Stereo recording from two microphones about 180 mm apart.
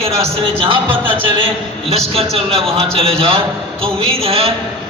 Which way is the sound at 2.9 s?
35° right (ahead or behind).